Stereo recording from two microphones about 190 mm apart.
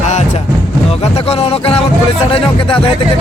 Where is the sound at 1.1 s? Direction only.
30° left (ahead or behind).